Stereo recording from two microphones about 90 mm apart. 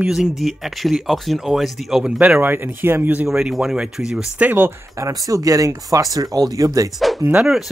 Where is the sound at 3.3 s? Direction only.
5° right (ahead or behind).